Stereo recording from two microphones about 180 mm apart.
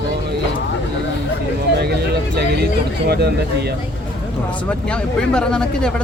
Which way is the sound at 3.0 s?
65° right (ahead or behind).